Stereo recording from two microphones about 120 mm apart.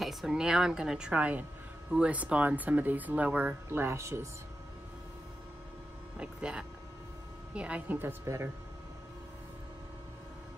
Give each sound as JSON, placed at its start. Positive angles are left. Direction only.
{"t": 0.0, "sound": "a woman's voice", "side_deg": 0}
{"t": 6.1, "sound": "speech", "side_deg": -5}